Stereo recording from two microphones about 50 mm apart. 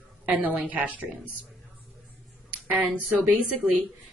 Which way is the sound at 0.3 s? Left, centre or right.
Right.